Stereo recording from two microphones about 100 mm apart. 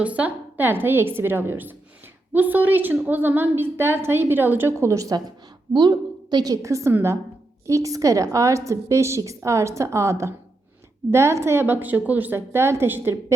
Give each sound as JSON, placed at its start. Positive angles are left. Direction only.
{"t": 0.0, "sound": "a woman's voice", "side_deg": -15}